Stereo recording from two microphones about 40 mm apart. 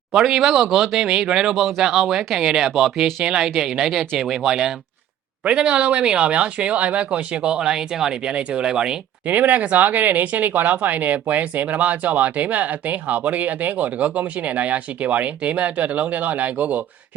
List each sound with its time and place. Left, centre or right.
0.1 s speech: centre
5.5 s speech: right
7.5 s speech: centre
8.2 s speech: right
9.2 s speech: right